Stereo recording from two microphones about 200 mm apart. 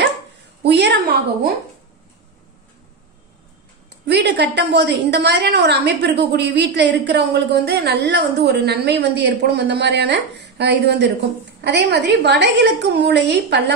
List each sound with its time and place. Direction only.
0.6 s a woman's voice: 55° right (ahead or behind)
4.0 s a woman's voice: 60° right (ahead or behind)